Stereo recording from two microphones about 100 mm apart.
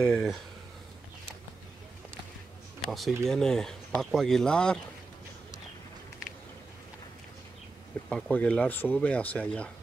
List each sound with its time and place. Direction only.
0.0 s speech: 5° left (ahead or behind)
2.8 s speech: centre (ahead or behind)
8.1 s speech: 15° left (ahead or behind)